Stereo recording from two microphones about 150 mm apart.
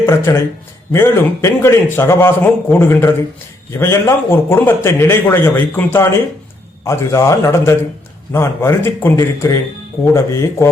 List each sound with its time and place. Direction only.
0.0 s a man's voice: 15° left (ahead or behind)